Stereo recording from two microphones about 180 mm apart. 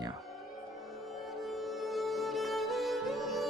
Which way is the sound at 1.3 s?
Centre (ahead or behind).